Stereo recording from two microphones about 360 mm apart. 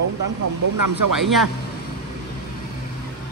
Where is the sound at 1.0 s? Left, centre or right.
Right.